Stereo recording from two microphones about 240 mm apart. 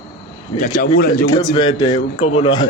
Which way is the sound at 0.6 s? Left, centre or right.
Left.